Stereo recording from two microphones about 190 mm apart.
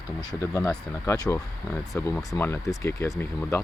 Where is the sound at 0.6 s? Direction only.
5° left (ahead or behind).